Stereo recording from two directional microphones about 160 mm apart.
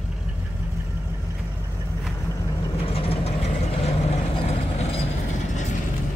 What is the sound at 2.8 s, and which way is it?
Vehicle, 35° left (ahead or behind).